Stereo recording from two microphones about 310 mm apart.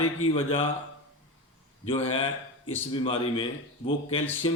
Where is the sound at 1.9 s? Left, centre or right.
Centre.